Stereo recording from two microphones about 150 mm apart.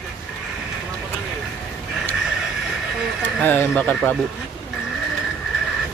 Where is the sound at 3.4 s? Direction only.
10° left (ahead or behind).